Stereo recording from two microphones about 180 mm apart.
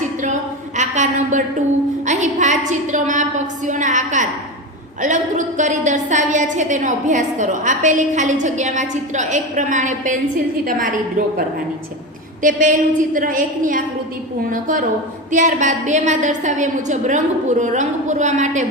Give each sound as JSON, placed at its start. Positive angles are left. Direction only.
{"t": 0.8, "sound": "a sound", "side_deg": -45}
{"t": 2.0, "sound": "a woman's voice", "side_deg": -40}
{"t": 12.4, "sound": "a woman's voice", "side_deg": -45}